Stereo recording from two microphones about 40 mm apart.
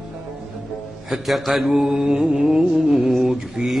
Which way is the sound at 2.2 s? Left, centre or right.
Right.